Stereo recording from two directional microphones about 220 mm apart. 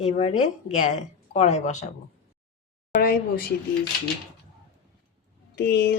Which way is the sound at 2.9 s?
45° left (ahead or behind).